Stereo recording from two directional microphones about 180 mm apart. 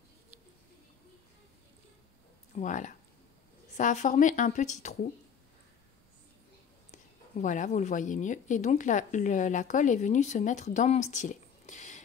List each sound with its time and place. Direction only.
2.5 s a woman's voice: 45° left (ahead or behind)
6.9 s a woman's voice: 45° left (ahead or behind)